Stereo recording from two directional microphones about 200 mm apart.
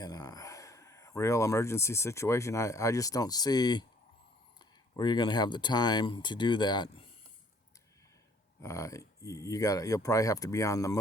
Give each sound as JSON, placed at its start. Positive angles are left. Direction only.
{"t": 0.0, "sound": "speech", "side_deg": 20}
{"t": 4.9, "sound": "speech", "side_deg": 20}
{"t": 8.6, "sound": "speech", "side_deg": 15}